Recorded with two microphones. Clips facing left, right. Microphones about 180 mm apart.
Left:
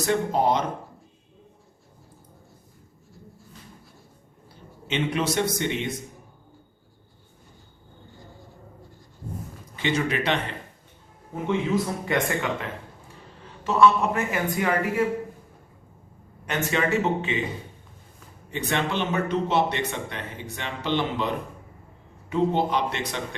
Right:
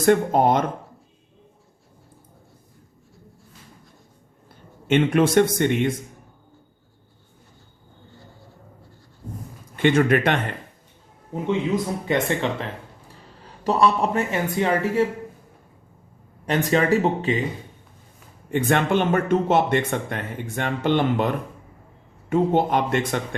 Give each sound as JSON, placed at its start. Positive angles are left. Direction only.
{"t": 0.0, "sound": "speech", "side_deg": -55}
{"t": 4.9, "sound": "speech", "side_deg": -50}
{"t": 9.7, "sound": "speech", "side_deg": -55}
{"t": 11.4, "sound": "speech", "side_deg": -20}
{"t": 13.4, "sound": "speech", "side_deg": -35}
{"t": 16.5, "sound": "speech", "side_deg": -35}
{"t": 18.5, "sound": "speech", "side_deg": -50}